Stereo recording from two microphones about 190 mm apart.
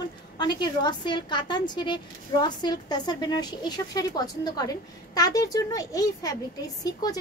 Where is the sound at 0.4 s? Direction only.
20° left (ahead or behind).